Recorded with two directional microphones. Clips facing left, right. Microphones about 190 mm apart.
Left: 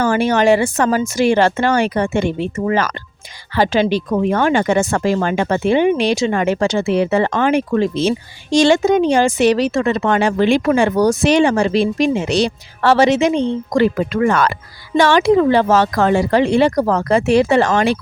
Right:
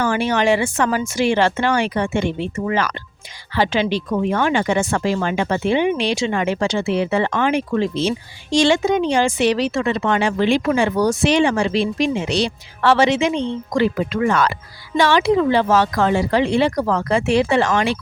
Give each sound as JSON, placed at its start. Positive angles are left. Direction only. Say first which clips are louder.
{"t": 0.0, "sound": "speech", "louder": "left 4 dB", "side_deg": 45}